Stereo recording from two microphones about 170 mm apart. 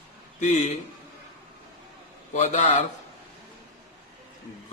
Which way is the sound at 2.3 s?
45° left (ahead or behind).